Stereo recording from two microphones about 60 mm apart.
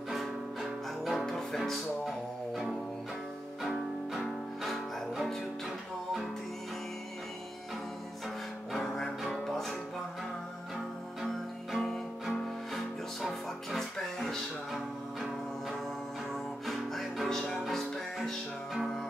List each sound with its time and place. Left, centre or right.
0.1 s music: centre
8.7 s music: centre
11.7 s music: centre
16.6 s music: centre